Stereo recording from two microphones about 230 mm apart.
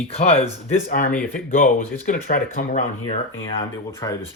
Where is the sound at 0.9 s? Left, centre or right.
Left.